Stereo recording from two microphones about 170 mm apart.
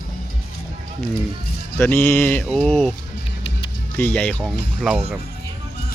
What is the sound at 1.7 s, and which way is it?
Speech, 15° left (ahead or behind).